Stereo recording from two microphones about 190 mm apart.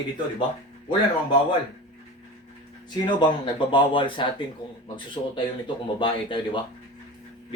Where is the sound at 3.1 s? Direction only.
25° left (ahead or behind).